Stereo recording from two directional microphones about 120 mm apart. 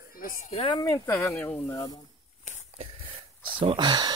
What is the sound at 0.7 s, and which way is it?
Speech, 35° left (ahead or behind).